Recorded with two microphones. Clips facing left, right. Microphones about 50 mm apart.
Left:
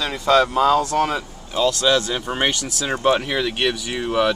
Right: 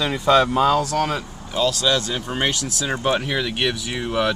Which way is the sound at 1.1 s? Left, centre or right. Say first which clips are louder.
Left 1 dB; centre.